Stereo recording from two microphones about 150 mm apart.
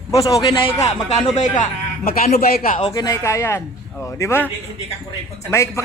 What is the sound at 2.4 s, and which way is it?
Speech, 70° left (ahead or behind).